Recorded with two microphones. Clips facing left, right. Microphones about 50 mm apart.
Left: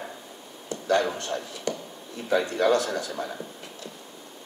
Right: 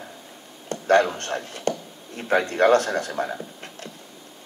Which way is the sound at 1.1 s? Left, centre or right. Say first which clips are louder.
Right 2 dB; right.